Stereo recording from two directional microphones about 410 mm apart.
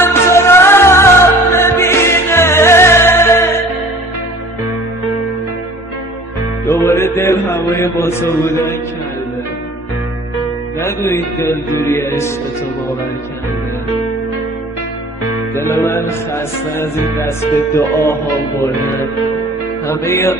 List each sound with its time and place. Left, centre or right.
0.0 s music: centre
6.7 s music: centre
10.8 s music: centre
15.5 s music: centre
19.9 s music: centre